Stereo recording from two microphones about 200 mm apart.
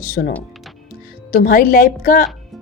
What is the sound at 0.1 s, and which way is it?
A woman's voice, 50° left (ahead or behind).